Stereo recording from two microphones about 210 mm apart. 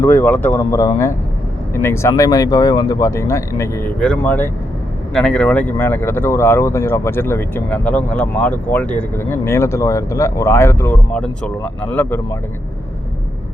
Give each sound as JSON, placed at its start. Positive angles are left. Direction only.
{"t": 0.0, "sound": "speech", "side_deg": 10}